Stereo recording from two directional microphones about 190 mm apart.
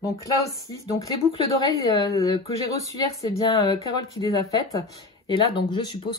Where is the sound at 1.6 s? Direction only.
20° left (ahead or behind).